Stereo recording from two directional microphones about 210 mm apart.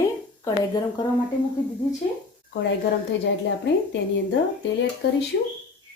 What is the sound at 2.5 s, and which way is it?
A woman's voice, 55° left (ahead or behind).